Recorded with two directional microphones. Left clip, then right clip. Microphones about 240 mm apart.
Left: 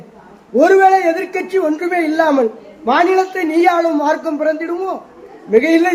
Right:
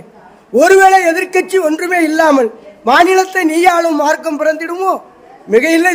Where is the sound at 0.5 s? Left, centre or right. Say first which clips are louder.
Right 3 dB; right.